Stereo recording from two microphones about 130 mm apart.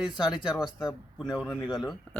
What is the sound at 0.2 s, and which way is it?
Speech, 35° left (ahead or behind).